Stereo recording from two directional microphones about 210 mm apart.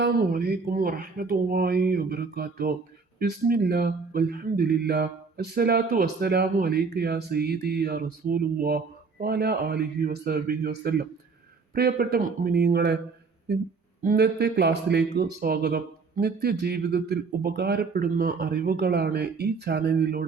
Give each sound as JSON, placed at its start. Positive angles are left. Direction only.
{"t": 0.0, "sound": "speech", "side_deg": -45}
{"t": 14.0, "sound": "speech", "side_deg": -45}